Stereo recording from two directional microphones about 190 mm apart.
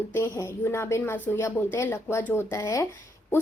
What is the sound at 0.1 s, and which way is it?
A woman's voice, 15° left (ahead or behind).